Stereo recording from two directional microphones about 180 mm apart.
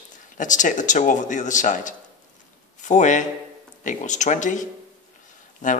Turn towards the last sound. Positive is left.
turn(degrees=45)  # may be behind; listen again after turning